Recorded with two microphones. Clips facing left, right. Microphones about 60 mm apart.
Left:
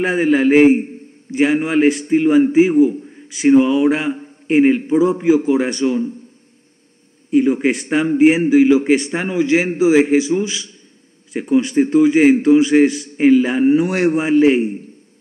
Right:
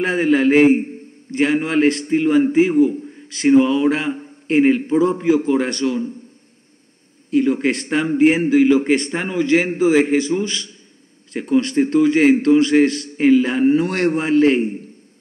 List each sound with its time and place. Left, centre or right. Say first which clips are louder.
0.0 s a man's voice: left 1 dB; centre
7.2 s a man's voice: left 2 dB; centre